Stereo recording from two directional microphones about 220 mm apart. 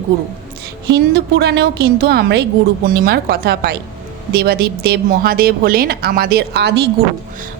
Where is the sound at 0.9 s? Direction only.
50° right (ahead or behind).